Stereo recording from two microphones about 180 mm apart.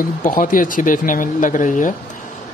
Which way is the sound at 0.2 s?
50° left (ahead or behind).